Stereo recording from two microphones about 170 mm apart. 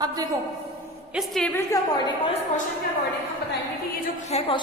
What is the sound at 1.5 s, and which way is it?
Speech, 20° left (ahead or behind).